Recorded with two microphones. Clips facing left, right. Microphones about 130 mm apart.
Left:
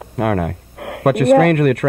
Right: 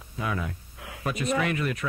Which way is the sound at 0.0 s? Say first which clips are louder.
Left 13 dB; 65° left (ahead or behind).